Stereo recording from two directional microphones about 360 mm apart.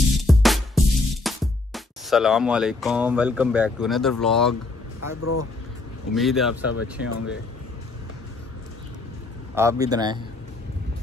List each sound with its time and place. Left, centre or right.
0.2 s music: centre
4.2 s speech: centre
5.1 s speech: left
6.1 s speech: centre
6.7 s speech: left
9.6 s a man's voice: centre